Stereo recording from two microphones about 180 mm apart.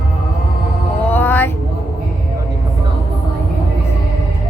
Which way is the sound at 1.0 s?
10° left (ahead or behind).